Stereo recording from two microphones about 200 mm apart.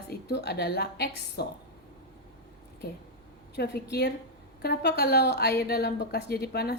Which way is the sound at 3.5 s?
55° left (ahead or behind).